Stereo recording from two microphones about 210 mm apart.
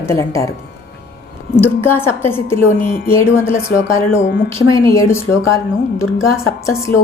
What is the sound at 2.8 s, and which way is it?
Speech, 45° left (ahead or behind).